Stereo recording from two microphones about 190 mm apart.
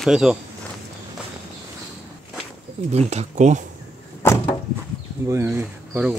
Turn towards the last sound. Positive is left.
turn(degrees=-10)  # may be behind; listen again after turning